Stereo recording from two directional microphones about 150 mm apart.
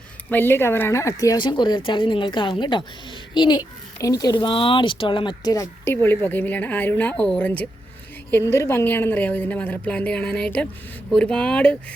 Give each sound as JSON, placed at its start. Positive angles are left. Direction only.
{"t": 0.3, "sound": "speech", "side_deg": 15}